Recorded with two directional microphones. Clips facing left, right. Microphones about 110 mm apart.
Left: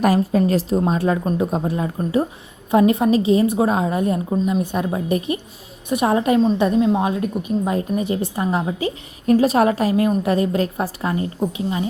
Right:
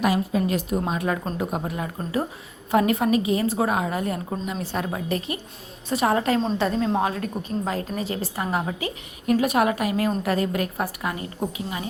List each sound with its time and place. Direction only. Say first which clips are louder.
0.0 s a woman's voice: left 6 dB; 40° left (ahead or behind); by 11.9 s 25° left (ahead or behind)